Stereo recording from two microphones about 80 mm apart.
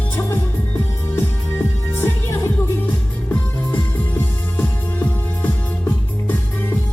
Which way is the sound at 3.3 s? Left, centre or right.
Left.